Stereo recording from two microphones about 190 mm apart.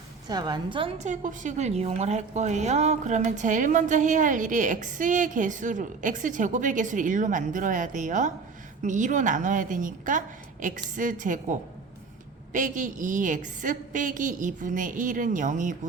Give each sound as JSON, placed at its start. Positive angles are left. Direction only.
{"t": 0.3, "sound": "a woman's voice", "side_deg": -20}
{"t": 12.5, "sound": "a woman's voice", "side_deg": -40}